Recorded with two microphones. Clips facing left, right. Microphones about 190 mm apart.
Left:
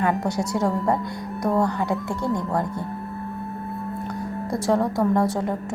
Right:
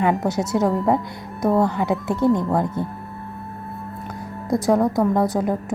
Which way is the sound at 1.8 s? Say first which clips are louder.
Right 5 dB; 20° right (ahead or behind).